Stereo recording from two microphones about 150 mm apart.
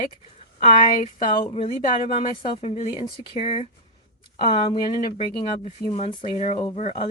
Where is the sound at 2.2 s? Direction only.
35° left (ahead or behind).